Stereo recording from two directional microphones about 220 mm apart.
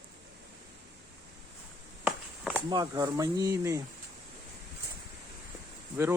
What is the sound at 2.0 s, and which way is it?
Walk, 5° right (ahead or behind).